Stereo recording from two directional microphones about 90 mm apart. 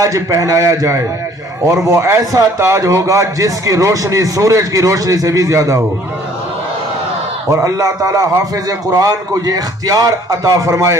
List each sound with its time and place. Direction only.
0.0 s speech: 35° right (ahead or behind)
7.5 s speech: 40° right (ahead or behind)